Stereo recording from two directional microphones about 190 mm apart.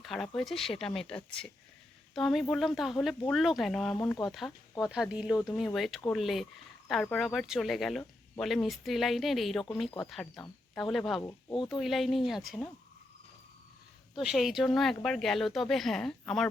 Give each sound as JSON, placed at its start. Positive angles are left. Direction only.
{"t": 0.0, "sound": "speech", "side_deg": 0}
{"t": 11.2, "sound": "speech", "side_deg": 15}
{"t": 11.7, "sound": "speech", "side_deg": 0}
{"t": 14.2, "sound": "speech", "side_deg": 0}